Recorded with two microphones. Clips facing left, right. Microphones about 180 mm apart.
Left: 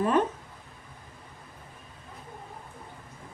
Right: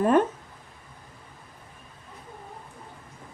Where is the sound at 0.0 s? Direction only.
50° right (ahead or behind).